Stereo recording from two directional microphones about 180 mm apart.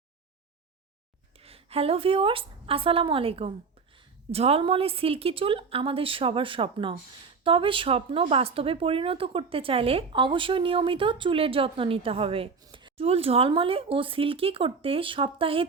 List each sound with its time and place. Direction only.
1.4 s a woman's voice: 35° right (ahead or behind)